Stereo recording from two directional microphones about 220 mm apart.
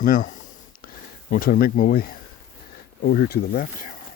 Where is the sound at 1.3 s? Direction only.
40° left (ahead or behind).